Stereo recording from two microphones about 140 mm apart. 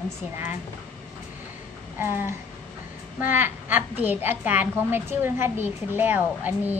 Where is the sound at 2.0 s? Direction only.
15° right (ahead or behind).